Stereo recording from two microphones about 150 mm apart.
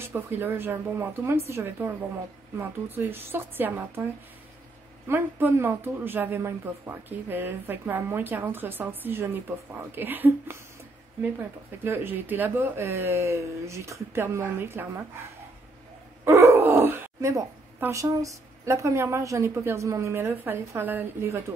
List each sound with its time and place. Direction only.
0.0 s speech: 15° right (ahead or behind)
5.0 s speech: 15° right (ahead or behind)
11.8 s speech: 15° right (ahead or behind)
16.3 s speech: 20° right (ahead or behind)